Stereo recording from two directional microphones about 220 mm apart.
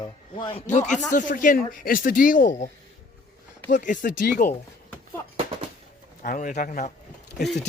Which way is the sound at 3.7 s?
35° left (ahead or behind).